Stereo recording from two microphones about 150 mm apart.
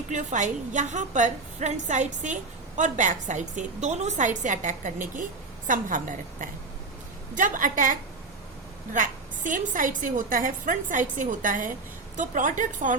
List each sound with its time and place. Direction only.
0.1 s a woman's voice: 55° right (ahead or behind)